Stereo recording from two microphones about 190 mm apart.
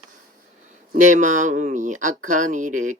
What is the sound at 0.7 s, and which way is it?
Speech, 40° right (ahead or behind).